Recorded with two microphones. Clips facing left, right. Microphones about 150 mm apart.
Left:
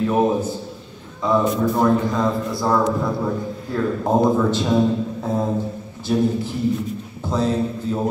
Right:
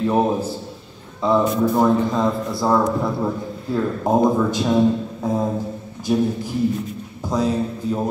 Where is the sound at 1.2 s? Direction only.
30° right (ahead or behind).